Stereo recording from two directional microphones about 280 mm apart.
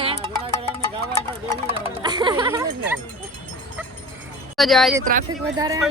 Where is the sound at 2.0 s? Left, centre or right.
Centre.